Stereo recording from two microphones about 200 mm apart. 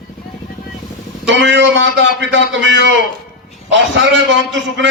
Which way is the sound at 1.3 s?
65° right (ahead or behind).